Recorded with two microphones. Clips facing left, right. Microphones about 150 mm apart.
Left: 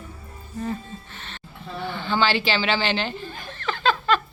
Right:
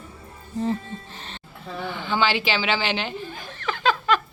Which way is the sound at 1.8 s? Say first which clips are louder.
Left 1 dB; 15° right (ahead or behind).